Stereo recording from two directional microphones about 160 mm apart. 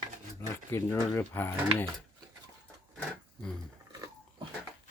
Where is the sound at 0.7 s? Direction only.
15° left (ahead or behind).